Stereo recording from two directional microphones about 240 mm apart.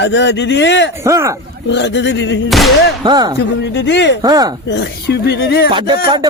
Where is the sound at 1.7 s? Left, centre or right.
Left.